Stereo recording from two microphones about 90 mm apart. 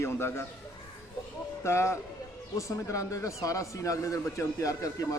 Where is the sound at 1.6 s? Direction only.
30° left (ahead or behind).